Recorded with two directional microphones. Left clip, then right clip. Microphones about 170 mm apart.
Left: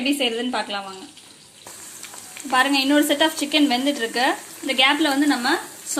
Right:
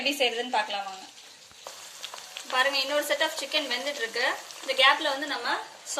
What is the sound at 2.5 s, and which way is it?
Speech, 40° left (ahead or behind).